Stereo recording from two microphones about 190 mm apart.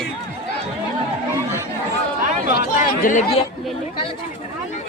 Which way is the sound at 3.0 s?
45° left (ahead or behind).